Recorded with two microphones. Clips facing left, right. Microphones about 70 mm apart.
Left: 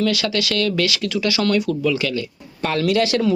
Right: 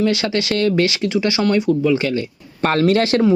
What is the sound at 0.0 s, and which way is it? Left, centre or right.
Speech, right.